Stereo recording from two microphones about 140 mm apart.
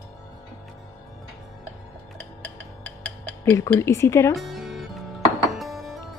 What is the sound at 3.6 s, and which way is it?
Speech, 20° left (ahead or behind).